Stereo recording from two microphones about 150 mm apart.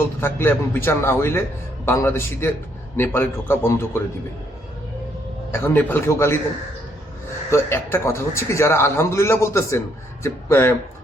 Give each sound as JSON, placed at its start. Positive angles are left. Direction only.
{"t": 0.2, "sound": "a man's voice", "side_deg": 15}
{"t": 5.5, "sound": "a man's voice", "side_deg": 15}
{"t": 7.5, "sound": "a man's voice", "side_deg": 15}